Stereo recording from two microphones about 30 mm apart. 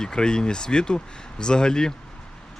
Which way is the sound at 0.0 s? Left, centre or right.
Left.